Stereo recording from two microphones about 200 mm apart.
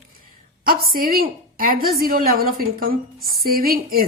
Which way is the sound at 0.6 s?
45° right (ahead or behind).